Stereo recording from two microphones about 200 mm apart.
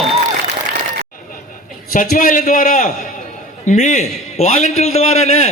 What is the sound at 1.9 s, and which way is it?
A man's voice, 45° left (ahead or behind).